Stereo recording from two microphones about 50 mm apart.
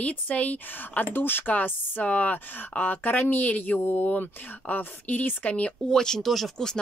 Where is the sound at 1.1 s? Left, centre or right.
Left.